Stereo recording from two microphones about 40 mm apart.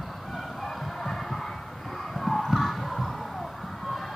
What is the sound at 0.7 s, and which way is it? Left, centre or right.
Music, centre.